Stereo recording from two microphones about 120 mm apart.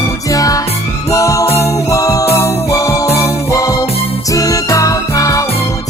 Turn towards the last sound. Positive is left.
turn(degrees=30)  # may be behind; listen again after turning